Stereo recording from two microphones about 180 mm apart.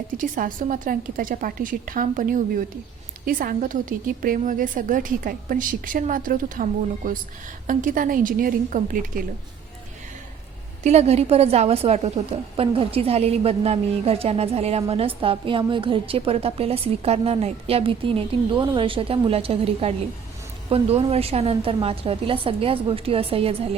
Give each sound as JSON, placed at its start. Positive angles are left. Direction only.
{"t": 0.2, "sound": "a woman's voice", "side_deg": -50}
{"t": 10.8, "sound": "a woman's voice", "side_deg": -35}